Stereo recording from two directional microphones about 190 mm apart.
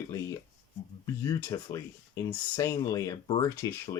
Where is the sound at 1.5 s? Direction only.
15° left (ahead or behind).